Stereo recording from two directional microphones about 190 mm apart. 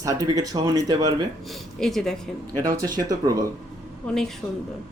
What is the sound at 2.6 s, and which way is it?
Speech, 20° right (ahead or behind).